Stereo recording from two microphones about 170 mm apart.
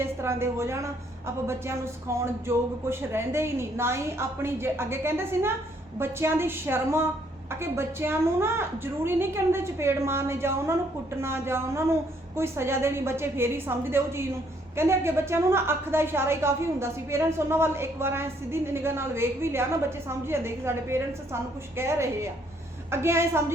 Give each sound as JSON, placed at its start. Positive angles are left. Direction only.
{"t": 0.0, "sound": "a woman's voice", "side_deg": -15}